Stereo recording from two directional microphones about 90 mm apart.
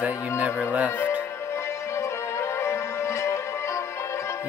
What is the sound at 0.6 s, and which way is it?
Music, 15° right (ahead or behind).